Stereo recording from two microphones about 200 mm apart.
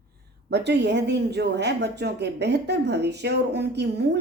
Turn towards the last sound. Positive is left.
turn(degrees=-60)  # may be behind; listen again after turning